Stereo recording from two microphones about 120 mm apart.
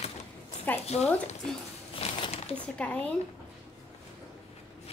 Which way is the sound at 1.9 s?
50° left (ahead or behind).